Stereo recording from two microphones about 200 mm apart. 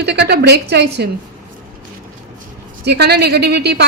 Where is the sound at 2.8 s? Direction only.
55° right (ahead or behind).